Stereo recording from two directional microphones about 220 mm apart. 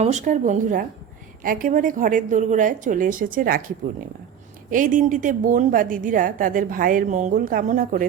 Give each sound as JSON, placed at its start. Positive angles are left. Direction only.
{"t": 0.0, "sound": "a woman's voice", "side_deg": -30}
{"t": 4.7, "sound": "a woman's voice", "side_deg": -35}